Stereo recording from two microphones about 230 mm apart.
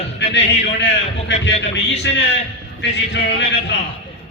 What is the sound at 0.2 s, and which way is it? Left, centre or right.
A man's voice, left.